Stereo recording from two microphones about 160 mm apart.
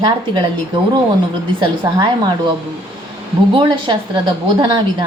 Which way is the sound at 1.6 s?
25° right (ahead or behind).